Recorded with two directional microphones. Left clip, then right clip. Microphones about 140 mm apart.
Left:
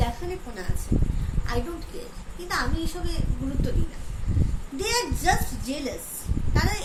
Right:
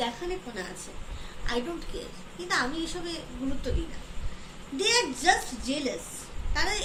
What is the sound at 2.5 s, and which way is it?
Speech, 20° left (ahead or behind).